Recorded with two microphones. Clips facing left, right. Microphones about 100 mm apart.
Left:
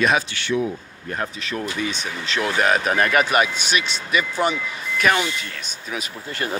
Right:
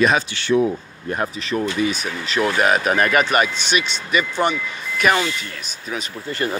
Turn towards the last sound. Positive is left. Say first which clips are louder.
# right 4 dB
turn(degrees=5)  # may be behind; listen again after turning